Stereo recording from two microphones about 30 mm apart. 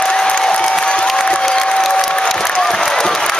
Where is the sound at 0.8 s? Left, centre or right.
Left.